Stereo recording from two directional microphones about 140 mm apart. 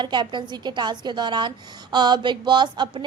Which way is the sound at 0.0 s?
35° right (ahead or behind).